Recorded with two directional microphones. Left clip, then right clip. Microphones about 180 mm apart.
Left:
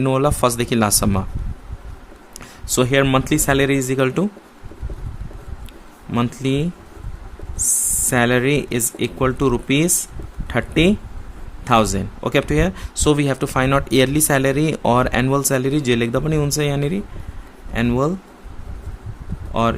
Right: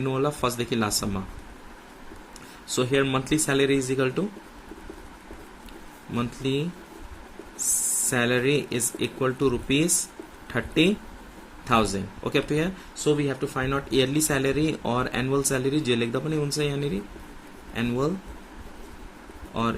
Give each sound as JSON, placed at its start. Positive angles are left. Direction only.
{"t": 0.0, "sound": "speech", "side_deg": 50}
{"t": 2.6, "sound": "speech", "side_deg": 45}
{"t": 6.1, "sound": "speech", "side_deg": 40}
{"t": 8.1, "sound": "speech", "side_deg": 40}
{"t": 13.1, "sound": "speech", "side_deg": 65}
{"t": 19.6, "sound": "speech", "side_deg": 40}